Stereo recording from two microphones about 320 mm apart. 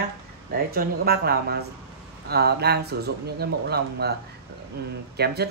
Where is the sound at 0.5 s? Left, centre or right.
Right.